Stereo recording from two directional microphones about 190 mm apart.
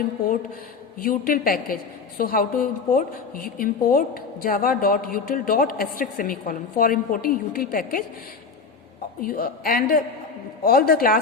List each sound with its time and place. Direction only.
0.9 s a woman's voice: 50° left (ahead or behind)
9.2 s a woman's voice: 50° left (ahead or behind)